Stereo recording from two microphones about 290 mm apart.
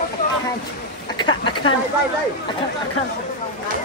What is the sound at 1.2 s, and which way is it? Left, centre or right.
Speech, centre.